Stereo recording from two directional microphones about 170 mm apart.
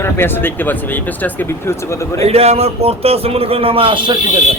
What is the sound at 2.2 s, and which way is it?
A man's voice, 35° right (ahead or behind).